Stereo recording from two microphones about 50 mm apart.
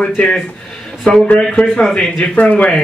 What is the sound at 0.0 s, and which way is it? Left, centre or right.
A man's voice, left.